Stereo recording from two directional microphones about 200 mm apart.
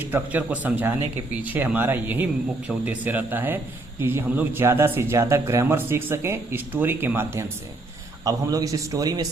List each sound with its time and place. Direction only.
0.1 s speech: 10° right (ahead or behind)